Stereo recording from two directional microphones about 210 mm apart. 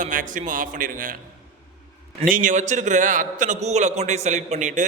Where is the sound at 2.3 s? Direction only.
35° right (ahead or behind).